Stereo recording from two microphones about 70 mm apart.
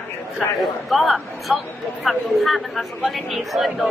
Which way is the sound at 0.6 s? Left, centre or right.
Centre.